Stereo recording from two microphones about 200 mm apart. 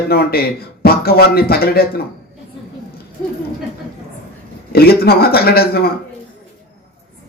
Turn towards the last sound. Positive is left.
turn(degrees=50)  # may be behind; listen again after turning